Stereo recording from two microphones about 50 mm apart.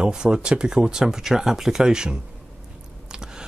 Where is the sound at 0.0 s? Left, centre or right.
Centre.